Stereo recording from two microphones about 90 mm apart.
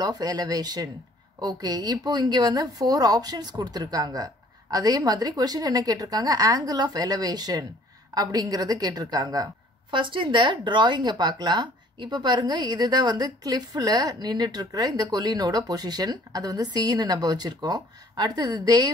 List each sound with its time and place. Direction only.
0.0 s speech: 45° right (ahead or behind)
9.8 s speech: 65° right (ahead or behind); by 18.9 s 50° right (ahead or behind)